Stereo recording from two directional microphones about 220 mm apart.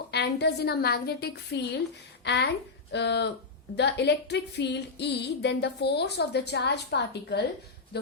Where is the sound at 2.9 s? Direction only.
50° left (ahead or behind).